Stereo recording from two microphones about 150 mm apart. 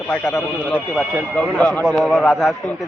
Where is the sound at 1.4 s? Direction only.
5° left (ahead or behind).